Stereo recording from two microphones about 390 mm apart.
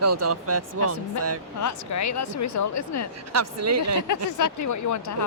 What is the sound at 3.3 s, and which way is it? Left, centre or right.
Speech, right.